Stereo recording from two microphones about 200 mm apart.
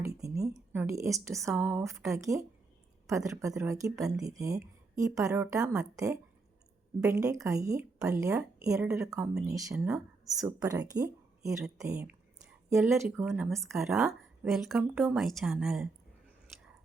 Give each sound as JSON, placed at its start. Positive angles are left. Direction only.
{"t": 0.0, "sound": "a sound", "side_deg": -15}
{"t": 1.5, "sound": "speech", "side_deg": -10}
{"t": 7.0, "sound": "speech", "side_deg": -15}
{"t": 9.7, "sound": "speech", "side_deg": -5}
{"t": 10.9, "sound": "a sound", "side_deg": -15}
{"t": 11.9, "sound": "speech", "side_deg": -5}